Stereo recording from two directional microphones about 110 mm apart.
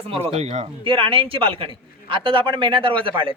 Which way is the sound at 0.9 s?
55° right (ahead or behind).